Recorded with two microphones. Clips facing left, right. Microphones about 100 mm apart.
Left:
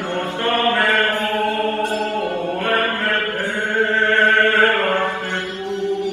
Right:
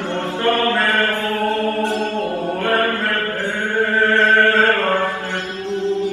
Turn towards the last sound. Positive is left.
turn(degrees=-25)  # may be behind; listen again after turning